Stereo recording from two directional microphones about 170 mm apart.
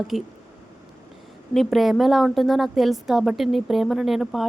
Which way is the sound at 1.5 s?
Centre (ahead or behind).